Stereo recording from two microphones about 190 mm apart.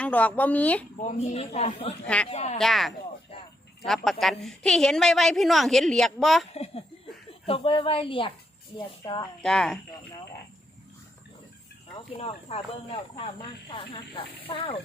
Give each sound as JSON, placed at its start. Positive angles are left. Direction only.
{"t": 0.0, "sound": "speech", "side_deg": 10}
{"t": 0.9, "sound": "a man's voice", "side_deg": 35}
{"t": 2.6, "sound": "a woman's voice", "side_deg": 0}
{"t": 6.5, "sound": "speech", "side_deg": 35}
{"t": 9.4, "sound": "a woman's voice", "side_deg": 5}
{"t": 12.1, "sound": "a man's voice", "side_deg": 30}